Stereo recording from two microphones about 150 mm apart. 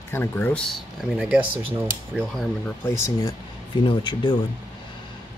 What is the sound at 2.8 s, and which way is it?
Speech, 15° left (ahead or behind).